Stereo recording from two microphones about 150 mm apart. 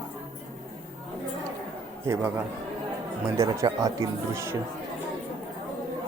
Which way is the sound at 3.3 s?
25° right (ahead or behind).